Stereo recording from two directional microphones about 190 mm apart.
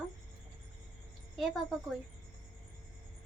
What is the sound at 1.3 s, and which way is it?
Speech, centre (ahead or behind).